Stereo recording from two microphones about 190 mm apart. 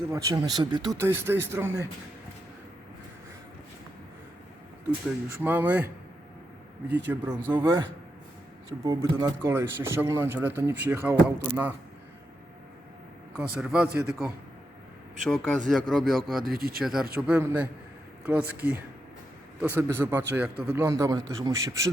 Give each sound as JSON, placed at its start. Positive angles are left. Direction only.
{"t": 0.1, "sound": "speech", "side_deg": -20}
{"t": 0.9, "sound": "speech", "side_deg": -10}
{"t": 5.4, "sound": "speech", "side_deg": -10}
{"t": 6.8, "sound": "a man's voice", "side_deg": -65}
{"t": 7.1, "sound": "speech", "side_deg": -10}
{"t": 7.5, "sound": "speech", "side_deg": -25}
{"t": 13.3, "sound": "a man's voice", "side_deg": -5}
{"t": 16.4, "sound": "speech", "side_deg": -50}
{"t": 16.8, "sound": "a man's voice", "side_deg": 0}